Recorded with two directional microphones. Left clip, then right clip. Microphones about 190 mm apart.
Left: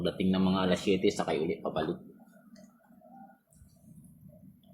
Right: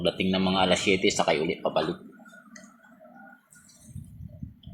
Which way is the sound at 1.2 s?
25° right (ahead or behind).